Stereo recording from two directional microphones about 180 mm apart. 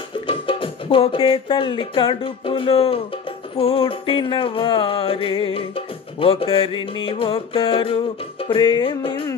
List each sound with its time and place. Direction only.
0.3 s music: 30° left (ahead or behind)